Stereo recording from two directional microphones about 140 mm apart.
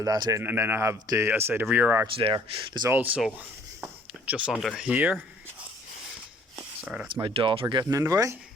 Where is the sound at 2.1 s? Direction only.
40° right (ahead or behind).